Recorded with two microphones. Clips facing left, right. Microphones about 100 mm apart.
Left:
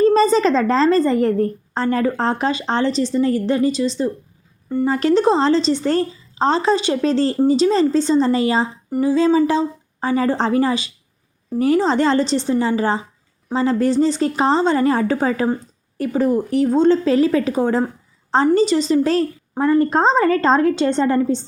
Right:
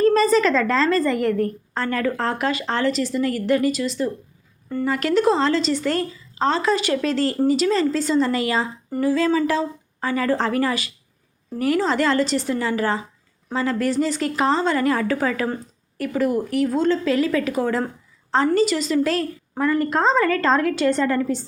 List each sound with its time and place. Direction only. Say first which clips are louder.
0.0 s a woman's voice: left 3 dB; 30° left (ahead or behind)